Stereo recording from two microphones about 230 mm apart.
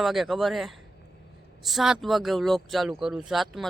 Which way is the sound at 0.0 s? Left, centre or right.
Centre.